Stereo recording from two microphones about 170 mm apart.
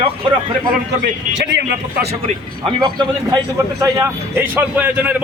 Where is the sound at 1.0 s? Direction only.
90° right.